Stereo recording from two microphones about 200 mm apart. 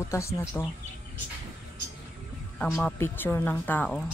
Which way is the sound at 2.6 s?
10° left (ahead or behind).